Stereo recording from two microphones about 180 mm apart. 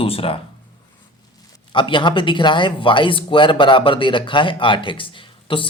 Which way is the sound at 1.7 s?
25° left (ahead or behind).